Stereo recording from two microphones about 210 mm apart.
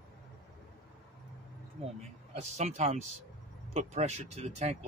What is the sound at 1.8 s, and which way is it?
Speech, 30° right (ahead or behind).